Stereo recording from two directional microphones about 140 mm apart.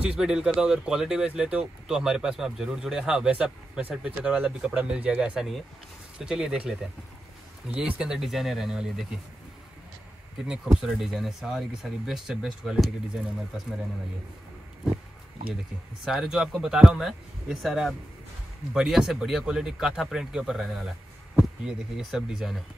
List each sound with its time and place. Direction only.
0.0 s speech: 5° right (ahead or behind)
7.7 s speech: 5° right (ahead or behind)
10.8 s speech: 5° right (ahead or behind)
16.0 s speech: centre (ahead or behind)